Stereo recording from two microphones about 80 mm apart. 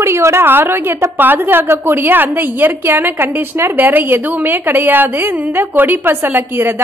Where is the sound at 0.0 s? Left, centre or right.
Right.